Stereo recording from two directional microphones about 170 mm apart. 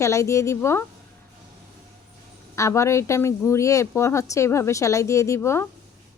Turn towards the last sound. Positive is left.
turn(degrees=15)  # may be behind; listen again after turning